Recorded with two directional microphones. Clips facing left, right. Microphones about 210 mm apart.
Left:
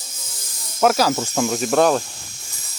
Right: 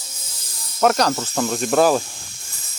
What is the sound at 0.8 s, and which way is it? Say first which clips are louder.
Speech: left 1 dB; 5° left (ahead or behind).